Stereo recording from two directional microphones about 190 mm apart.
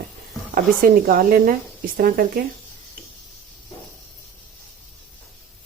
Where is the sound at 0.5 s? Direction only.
50° right (ahead or behind).